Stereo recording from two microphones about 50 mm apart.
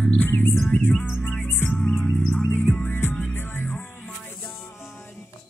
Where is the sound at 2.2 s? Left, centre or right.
Left.